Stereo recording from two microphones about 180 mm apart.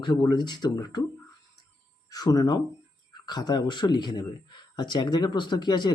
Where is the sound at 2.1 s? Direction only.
20° left (ahead or behind).